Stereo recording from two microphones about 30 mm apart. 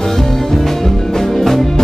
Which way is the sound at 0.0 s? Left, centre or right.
Centre.